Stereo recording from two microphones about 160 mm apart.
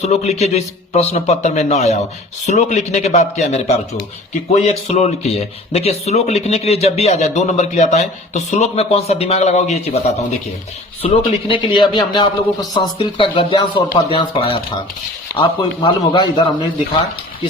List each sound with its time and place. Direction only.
0.0 s a man's voice: 45° left (ahead or behind); by 16.4 s 25° left (ahead or behind)